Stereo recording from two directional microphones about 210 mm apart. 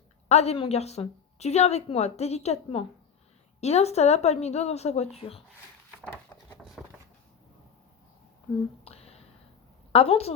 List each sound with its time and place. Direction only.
0.3 s a woman's voice: 30° left (ahead or behind)
8.5 s speech: 5° left (ahead or behind)
8.8 s a sound: 30° left (ahead or behind)
9.9 s a woman's voice: 25° left (ahead or behind)